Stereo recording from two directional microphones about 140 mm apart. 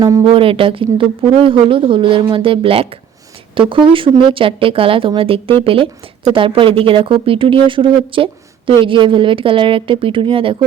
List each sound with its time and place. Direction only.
0.3 s speech: 40° right (ahead or behind)